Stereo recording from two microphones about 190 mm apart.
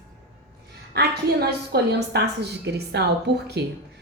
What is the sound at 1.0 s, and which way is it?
A woman's voice, 60° right (ahead or behind).